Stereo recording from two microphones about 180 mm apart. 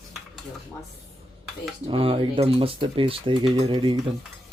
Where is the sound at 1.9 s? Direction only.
30° right (ahead or behind).